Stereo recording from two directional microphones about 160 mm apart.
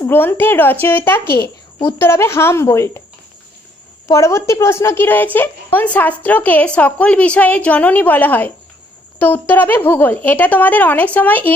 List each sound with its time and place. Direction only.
0.0 s a woman's voice: 15° left (ahead or behind)
4.1 s a woman's voice: 20° left (ahead or behind)